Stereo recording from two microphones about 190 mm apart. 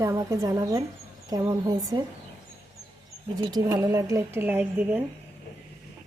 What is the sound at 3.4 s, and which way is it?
Speech, 20° right (ahead or behind).